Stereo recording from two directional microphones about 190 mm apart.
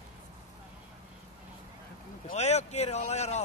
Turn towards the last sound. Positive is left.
turn(degrees=35)  # may be behind; listen again after turning